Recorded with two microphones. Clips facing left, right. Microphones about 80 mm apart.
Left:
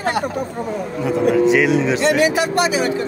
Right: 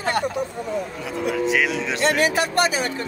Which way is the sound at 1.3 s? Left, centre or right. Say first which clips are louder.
Left 7 dB; centre.